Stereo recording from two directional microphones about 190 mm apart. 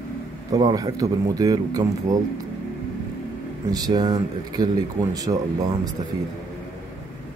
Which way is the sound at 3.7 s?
20° right (ahead or behind).